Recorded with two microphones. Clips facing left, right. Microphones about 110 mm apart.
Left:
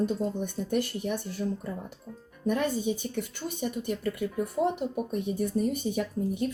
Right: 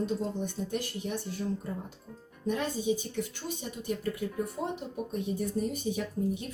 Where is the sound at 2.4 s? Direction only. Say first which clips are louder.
Left 2 dB; 55° left (ahead or behind).